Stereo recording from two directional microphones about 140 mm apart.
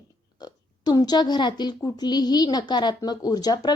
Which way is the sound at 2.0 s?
30° left (ahead or behind).